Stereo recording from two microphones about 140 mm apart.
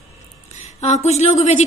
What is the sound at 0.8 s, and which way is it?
Speech, 55° left (ahead or behind).